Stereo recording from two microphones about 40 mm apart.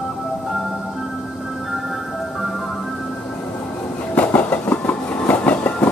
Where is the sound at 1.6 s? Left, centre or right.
Centre.